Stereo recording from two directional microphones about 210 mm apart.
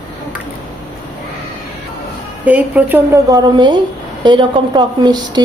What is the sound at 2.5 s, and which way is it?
Speech, 5° right (ahead or behind).